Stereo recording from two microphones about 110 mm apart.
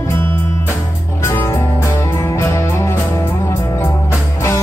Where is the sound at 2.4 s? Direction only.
25° left (ahead or behind).